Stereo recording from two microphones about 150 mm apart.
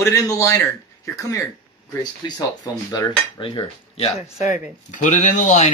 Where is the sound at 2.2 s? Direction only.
25° left (ahead or behind).